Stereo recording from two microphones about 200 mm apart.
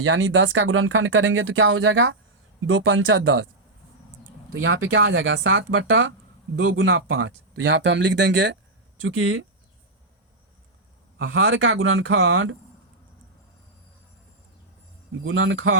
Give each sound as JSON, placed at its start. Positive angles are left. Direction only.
{"t": 0.0, "sound": "speech", "side_deg": -75}
{"t": 2.7, "sound": "speech", "side_deg": -70}
{"t": 4.6, "sound": "speech", "side_deg": -80}
{"t": 6.7, "sound": "speech", "side_deg": -90}
{"t": 9.0, "sound": "speech", "side_deg": -90}
{"t": 11.2, "sound": "speech", "side_deg": -75}
{"t": 15.2, "sound": "speech", "side_deg": -90}